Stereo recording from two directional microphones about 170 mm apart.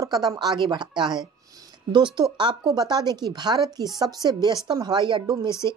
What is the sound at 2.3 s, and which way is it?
Speech, 25° right (ahead or behind).